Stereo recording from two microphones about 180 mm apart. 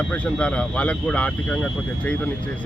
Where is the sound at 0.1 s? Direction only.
5° left (ahead or behind).